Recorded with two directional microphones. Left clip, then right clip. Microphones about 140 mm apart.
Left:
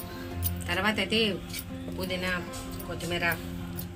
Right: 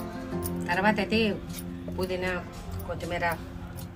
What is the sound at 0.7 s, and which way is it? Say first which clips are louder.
Speech: right 2 dB; 25° right (ahead or behind).